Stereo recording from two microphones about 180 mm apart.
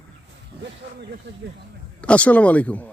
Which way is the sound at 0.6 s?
70° right (ahead or behind).